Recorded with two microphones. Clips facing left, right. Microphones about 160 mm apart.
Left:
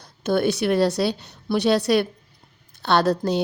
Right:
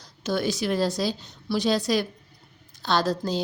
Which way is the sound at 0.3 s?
60° left (ahead or behind).